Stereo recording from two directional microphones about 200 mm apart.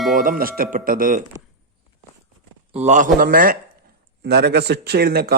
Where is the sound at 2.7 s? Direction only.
35° right (ahead or behind); by 5.3 s 50° right (ahead or behind).